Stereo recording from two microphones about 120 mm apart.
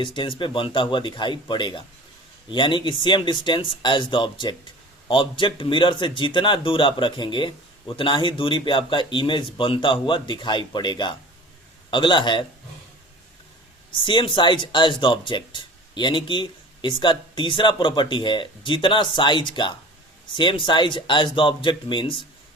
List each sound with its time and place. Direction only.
0.0 s a man's voice: 45° left (ahead or behind)
14.0 s a man's voice: 40° left (ahead or behind)